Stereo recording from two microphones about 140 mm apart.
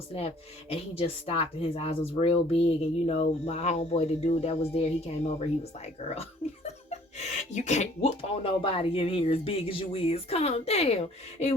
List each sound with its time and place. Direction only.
0.1 s speech: 45° left (ahead or behind)